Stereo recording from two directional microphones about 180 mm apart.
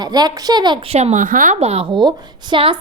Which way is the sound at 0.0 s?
20° right (ahead or behind).